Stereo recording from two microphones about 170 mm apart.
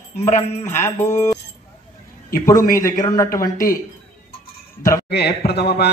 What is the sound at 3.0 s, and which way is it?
Speech, 20° left (ahead or behind).